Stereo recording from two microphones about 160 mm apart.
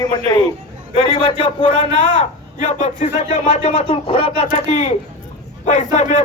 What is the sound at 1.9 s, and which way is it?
Speech, 30° right (ahead or behind).